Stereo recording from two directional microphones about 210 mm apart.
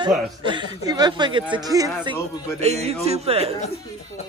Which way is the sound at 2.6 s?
30° right (ahead or behind).